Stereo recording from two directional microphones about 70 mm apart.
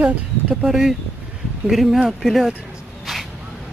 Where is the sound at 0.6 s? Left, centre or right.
Centre.